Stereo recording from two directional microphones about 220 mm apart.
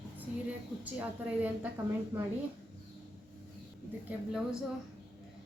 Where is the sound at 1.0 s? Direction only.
5° right (ahead or behind).